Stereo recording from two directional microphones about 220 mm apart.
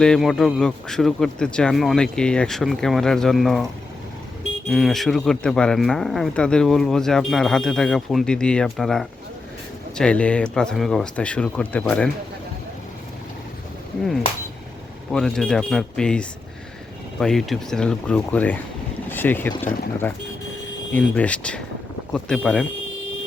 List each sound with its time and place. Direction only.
0.0 s speech: centre (ahead or behind)
4.7 s speech: centre (ahead or behind)
15.1 s speech: 5° left (ahead or behind)